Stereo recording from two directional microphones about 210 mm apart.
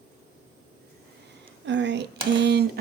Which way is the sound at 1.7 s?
55° right (ahead or behind).